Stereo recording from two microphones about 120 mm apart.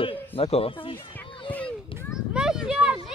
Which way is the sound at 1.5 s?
10° left (ahead or behind).